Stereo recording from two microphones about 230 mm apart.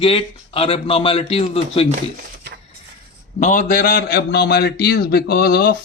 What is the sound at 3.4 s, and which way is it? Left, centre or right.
A man's voice, left.